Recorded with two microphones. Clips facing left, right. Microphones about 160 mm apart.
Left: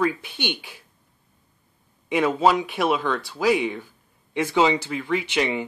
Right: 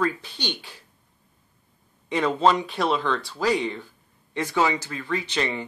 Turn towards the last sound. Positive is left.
turn(degrees=15)  # may be behind; listen again after turning